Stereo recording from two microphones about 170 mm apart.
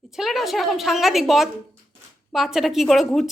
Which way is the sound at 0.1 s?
Centre (ahead or behind).